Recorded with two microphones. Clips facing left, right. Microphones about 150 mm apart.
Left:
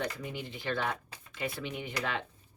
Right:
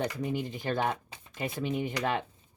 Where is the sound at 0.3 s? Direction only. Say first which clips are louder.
Right 4 dB; 45° right (ahead or behind).